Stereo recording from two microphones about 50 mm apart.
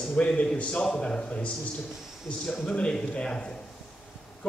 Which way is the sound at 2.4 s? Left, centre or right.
Centre.